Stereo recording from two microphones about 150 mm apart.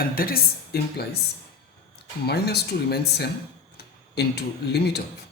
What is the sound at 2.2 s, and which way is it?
Speech, 90° left.